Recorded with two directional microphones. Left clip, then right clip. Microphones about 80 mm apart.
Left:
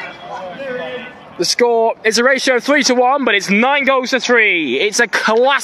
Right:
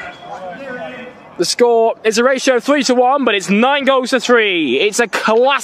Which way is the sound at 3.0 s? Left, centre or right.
Right.